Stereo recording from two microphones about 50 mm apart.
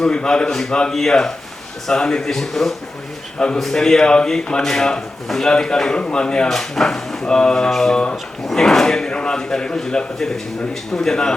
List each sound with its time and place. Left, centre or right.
0.0 s speech: centre
3.3 s a man's voice: centre